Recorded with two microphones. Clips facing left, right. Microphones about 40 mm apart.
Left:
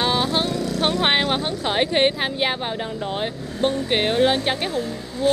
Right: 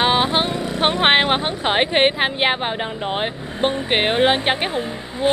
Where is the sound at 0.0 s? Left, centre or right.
Right.